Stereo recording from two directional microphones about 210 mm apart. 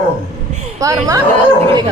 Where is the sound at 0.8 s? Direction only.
15° right (ahead or behind).